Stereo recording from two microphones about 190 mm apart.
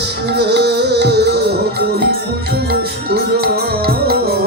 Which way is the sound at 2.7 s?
55° right (ahead or behind).